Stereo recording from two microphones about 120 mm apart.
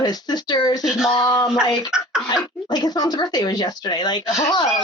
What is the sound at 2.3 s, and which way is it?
Speech, 35° left (ahead or behind).